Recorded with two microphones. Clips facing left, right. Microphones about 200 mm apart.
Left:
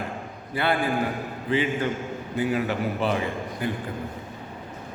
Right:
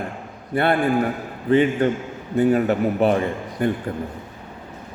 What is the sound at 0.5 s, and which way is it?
A man's voice, 55° right (ahead or behind).